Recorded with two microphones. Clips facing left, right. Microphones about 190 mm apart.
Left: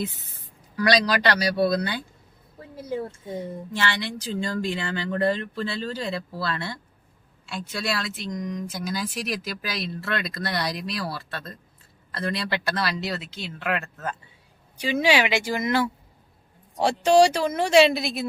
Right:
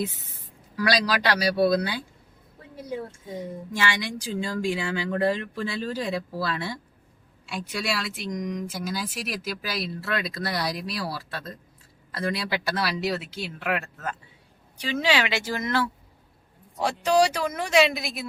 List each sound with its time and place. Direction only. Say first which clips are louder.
0.8 s speech: left 3 dB; 5° right (ahead or behind)
3.8 s speech: even; 10° right (ahead or behind)
14.8 s speech: left 3 dB; 15° left (ahead or behind)
16.7 s speech: left 4 dB; 30° left (ahead or behind)